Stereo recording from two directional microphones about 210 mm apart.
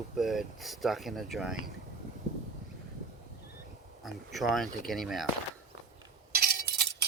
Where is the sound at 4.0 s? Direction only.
Centre (ahead or behind).